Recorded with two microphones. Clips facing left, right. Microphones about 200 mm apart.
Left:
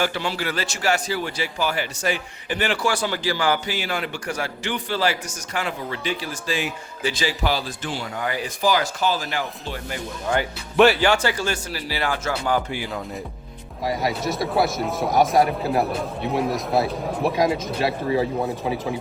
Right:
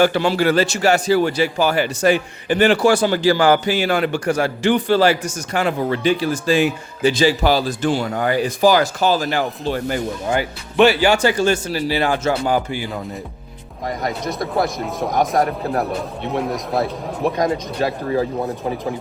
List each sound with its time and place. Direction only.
0.0 s speech: 65° right (ahead or behind)
0.5 s speech: 30° right (ahead or behind)
1.1 s speech: 65° right (ahead or behind)
2.5 s a man's voice: 45° right (ahead or behind)
7.0 s speech: 25° right (ahead or behind); by 8.3 s 50° right (ahead or behind)
8.3 s speech: 40° right (ahead or behind)
11.0 s speech: 15° right (ahead or behind)
13.8 s a man's voice: centre (ahead or behind)